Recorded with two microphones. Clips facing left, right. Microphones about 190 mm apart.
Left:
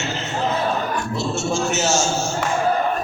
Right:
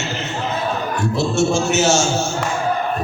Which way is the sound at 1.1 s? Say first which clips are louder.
Right 6 dB; 60° right (ahead or behind).